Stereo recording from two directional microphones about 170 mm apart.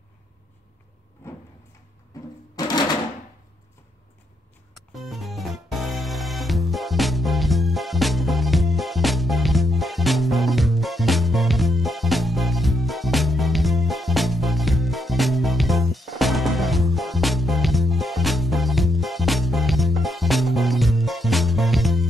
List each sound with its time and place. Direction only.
2.1 s music: 20° left (ahead or behind)
4.7 s music: centre (ahead or behind)